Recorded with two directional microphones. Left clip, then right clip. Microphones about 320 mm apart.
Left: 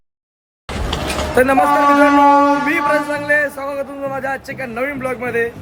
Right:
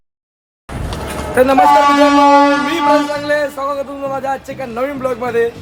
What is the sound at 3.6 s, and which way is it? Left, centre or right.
Speech, centre.